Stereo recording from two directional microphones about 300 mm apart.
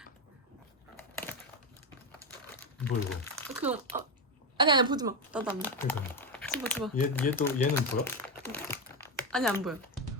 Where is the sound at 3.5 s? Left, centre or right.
Centre.